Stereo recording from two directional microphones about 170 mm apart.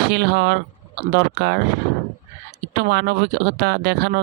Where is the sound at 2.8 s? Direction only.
75° right (ahead or behind).